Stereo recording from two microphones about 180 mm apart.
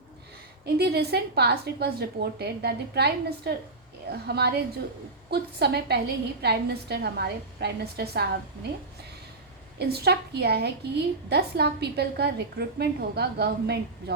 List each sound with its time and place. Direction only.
0.6 s a woman's voice: 65° right (ahead or behind)
9.7 s a woman's voice: 60° right (ahead or behind)